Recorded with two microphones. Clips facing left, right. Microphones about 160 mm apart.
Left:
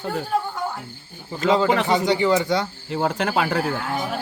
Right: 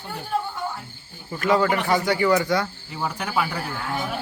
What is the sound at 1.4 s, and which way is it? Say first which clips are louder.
Speech: left 2 dB; 20° left (ahead or behind).